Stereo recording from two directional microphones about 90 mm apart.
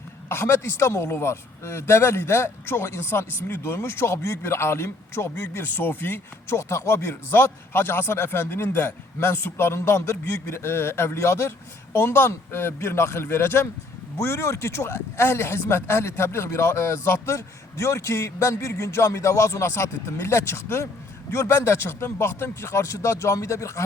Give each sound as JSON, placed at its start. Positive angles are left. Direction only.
{"t": 0.3, "sound": "speech", "side_deg": 30}